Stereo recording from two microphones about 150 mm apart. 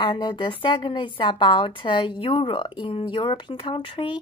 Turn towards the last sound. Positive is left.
turn(degrees=35)  # may be behind; listen again after turning